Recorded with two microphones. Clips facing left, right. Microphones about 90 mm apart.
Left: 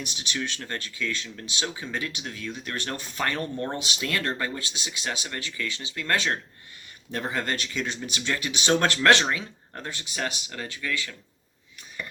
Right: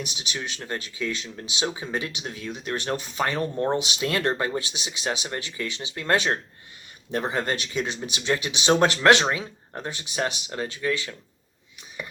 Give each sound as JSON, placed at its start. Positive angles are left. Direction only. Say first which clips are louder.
{"t": 0.0, "sound": "speech", "louder": "left 1 dB", "side_deg": -15}